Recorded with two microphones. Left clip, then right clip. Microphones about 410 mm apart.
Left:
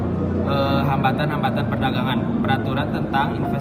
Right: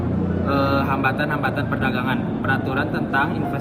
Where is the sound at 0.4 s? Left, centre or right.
Centre.